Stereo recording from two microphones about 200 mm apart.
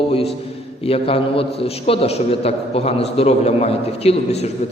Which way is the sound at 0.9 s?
30° left (ahead or behind).